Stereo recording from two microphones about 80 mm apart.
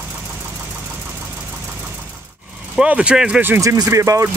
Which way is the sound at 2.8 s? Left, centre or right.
Centre.